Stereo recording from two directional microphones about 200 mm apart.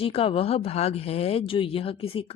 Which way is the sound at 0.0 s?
30° left (ahead or behind).